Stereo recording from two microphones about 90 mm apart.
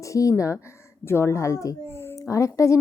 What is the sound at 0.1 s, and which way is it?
A woman's voice, 35° left (ahead or behind).